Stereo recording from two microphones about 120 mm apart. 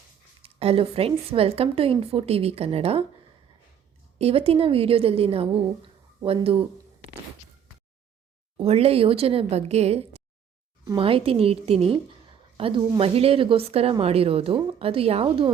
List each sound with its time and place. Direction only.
0.4 s a woman's voice: 50° right (ahead or behind)
4.2 s a woman's voice: 55° right (ahead or behind)
8.5 s speech: 60° right (ahead or behind)
10.9 s a woman's voice: 50° right (ahead or behind)